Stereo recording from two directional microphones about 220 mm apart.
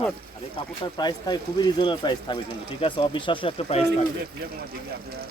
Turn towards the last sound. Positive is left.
turn(degrees=25)  # may be behind; listen again after turning